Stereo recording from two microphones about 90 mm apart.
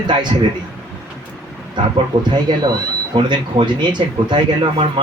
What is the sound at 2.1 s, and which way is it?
A man's voice, 55° right (ahead or behind).